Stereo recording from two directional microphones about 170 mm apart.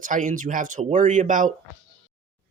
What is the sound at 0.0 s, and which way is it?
Speech, 50° right (ahead or behind).